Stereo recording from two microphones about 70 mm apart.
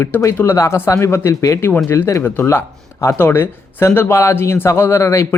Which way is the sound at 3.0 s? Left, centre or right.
Left.